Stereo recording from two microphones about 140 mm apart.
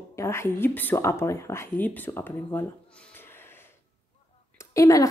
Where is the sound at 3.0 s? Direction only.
15° left (ahead or behind).